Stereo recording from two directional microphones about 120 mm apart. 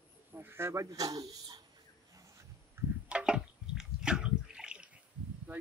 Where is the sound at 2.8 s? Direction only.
20° right (ahead or behind).